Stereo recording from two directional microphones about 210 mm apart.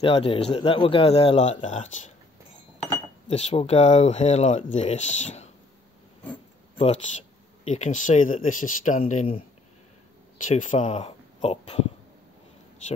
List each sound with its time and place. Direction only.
0.0 s a man's voice: 25° left (ahead or behind)
3.3 s speech: 30° left (ahead or behind)
7.6 s speech: 35° left (ahead or behind)
10.5 s speech: 35° left (ahead or behind)